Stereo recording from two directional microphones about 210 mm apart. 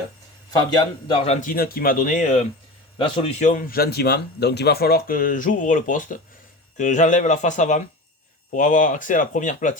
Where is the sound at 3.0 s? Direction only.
25° left (ahead or behind).